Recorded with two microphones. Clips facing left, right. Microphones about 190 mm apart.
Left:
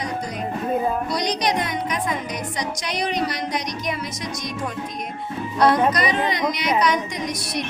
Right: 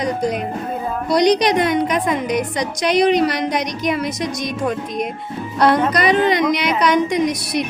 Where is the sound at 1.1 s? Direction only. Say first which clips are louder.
Right 8 dB; 65° right (ahead or behind).